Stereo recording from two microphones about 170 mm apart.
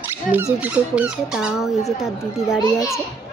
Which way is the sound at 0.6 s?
10° right (ahead or behind).